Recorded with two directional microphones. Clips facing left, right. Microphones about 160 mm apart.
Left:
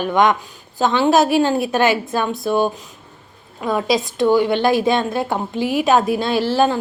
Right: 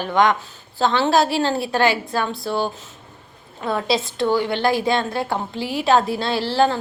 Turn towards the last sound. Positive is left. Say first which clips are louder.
# left 2 dB
turn(degrees=15)  # may be behind; listen again after turning